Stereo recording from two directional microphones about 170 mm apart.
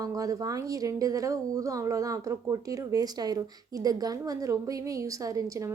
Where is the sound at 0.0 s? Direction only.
20° right (ahead or behind).